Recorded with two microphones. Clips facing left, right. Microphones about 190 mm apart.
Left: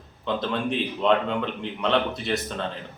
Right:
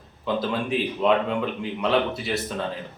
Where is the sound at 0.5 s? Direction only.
5° right (ahead or behind).